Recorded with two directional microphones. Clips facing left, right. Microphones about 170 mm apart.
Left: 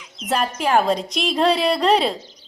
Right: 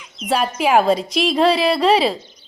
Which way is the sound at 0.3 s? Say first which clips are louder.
Right 3 dB; 5° right (ahead or behind).